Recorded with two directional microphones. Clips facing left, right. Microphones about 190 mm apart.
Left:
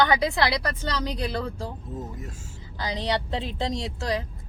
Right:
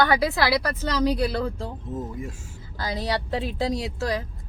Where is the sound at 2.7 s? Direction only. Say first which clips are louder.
Even; 15° left (ahead or behind).